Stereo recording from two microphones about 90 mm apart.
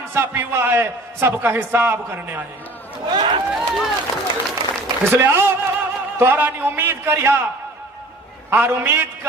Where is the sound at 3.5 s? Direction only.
Centre (ahead or behind).